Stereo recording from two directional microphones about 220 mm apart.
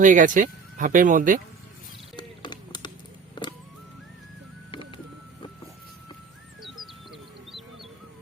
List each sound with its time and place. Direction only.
0.0 s speech: 35° right (ahead or behind)
2.1 s a sound: 20° left (ahead or behind)
4.7 s music: 20° left (ahead or behind)
6.6 s bird: centre (ahead or behind)